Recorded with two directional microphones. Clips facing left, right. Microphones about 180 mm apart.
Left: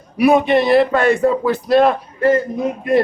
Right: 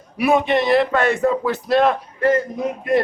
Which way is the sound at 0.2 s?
40° left (ahead or behind).